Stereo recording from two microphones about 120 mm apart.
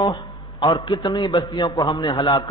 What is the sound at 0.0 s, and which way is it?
A man's voice, 40° left (ahead or behind).